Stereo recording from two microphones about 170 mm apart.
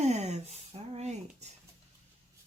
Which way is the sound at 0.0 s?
40° right (ahead or behind).